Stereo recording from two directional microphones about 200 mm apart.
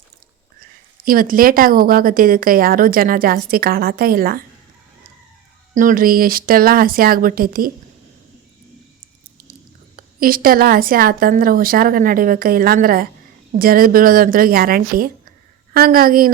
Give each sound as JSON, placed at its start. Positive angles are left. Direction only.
{"t": 1.0, "sound": "a woman's voice", "side_deg": -45}
{"t": 5.7, "sound": "a woman's voice", "side_deg": -40}
{"t": 9.9, "sound": "a woman's voice", "side_deg": -45}